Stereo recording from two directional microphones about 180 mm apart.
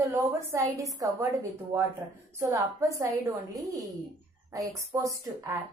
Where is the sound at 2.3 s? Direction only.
15° right (ahead or behind).